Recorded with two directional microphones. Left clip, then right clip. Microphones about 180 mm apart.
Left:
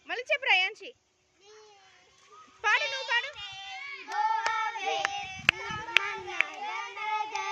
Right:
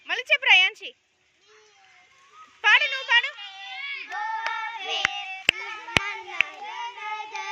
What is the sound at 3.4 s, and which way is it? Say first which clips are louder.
Child singing: right 4 dB; 55° left (ahead or behind).